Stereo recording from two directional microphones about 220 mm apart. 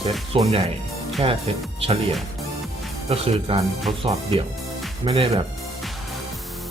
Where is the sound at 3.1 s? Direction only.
25° right (ahead or behind).